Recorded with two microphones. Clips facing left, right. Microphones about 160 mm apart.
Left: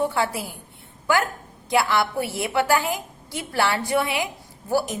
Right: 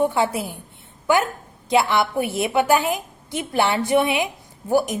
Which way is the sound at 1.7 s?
20° right (ahead or behind).